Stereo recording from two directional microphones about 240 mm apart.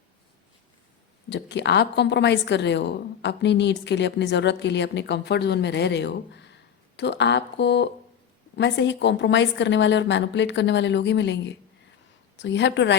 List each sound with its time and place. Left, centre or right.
1.3 s a woman's voice: left